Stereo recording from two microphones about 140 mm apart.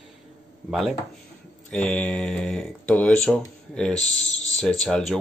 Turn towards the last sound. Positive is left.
turn(degrees=5)  # may be behind; listen again after turning